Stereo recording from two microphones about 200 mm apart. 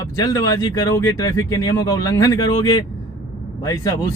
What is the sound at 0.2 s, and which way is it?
Speech, 20° left (ahead or behind).